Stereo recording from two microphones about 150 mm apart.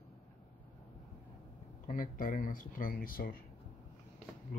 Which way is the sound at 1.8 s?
60° left (ahead or behind).